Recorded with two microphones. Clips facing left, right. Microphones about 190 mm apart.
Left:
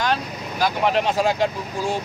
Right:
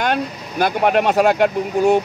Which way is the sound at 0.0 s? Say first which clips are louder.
Right 3 dB; 55° right (ahead or behind).